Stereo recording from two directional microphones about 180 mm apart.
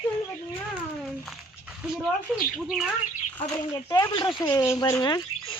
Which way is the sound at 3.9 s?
25° left (ahead or behind).